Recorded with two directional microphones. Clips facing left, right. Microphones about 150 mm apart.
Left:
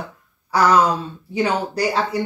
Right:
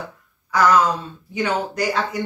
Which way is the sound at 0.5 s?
30° left (ahead or behind).